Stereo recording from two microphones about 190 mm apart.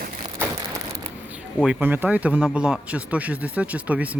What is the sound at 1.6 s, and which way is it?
Speech, 10° right (ahead or behind).